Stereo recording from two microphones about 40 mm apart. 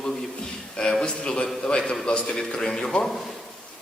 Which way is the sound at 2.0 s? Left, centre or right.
Left.